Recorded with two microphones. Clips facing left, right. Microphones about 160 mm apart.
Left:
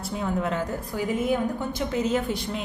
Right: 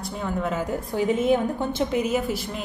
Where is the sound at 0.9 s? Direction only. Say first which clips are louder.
Right 5 dB; 25° right (ahead or behind).